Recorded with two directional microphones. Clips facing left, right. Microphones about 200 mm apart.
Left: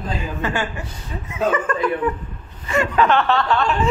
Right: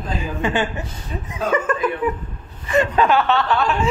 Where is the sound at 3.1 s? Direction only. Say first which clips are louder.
Even; centre (ahead or behind).